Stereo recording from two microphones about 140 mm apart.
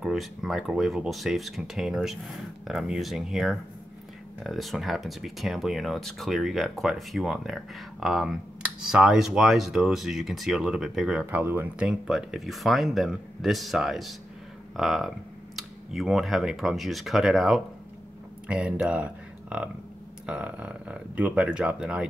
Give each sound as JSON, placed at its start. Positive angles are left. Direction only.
{"t": 0.0, "sound": "speech", "side_deg": 0}
{"t": 11.2, "sound": "speech", "side_deg": -15}